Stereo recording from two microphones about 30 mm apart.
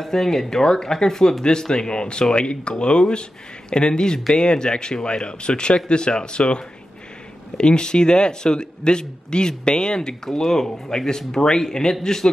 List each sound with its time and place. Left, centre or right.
0.0 s a man's voice: centre